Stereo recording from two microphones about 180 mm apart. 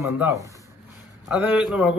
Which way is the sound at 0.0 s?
15° right (ahead or behind).